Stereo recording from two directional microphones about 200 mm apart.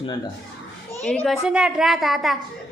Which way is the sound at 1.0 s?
5° left (ahead or behind).